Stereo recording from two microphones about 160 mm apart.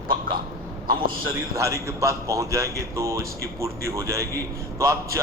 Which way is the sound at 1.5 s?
20° right (ahead or behind).